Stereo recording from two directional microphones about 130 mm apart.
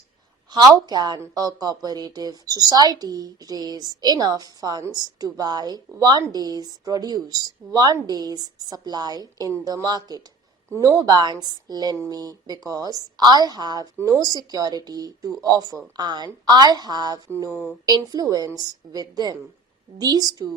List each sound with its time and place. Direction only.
0.7 s speech: 30° right (ahead or behind)